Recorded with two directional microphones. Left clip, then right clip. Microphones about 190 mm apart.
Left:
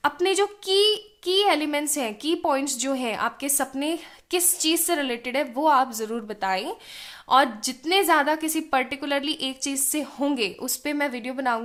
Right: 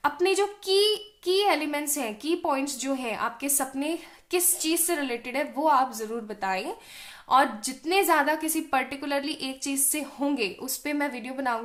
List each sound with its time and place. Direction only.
0.0 s a woman's voice: 30° left (ahead or behind)